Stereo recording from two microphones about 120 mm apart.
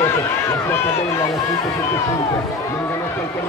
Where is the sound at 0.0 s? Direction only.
20° left (ahead or behind).